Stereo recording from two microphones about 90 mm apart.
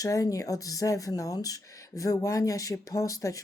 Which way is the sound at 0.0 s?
40° left (ahead or behind).